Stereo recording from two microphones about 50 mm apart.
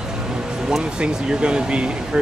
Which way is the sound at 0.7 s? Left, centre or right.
Centre.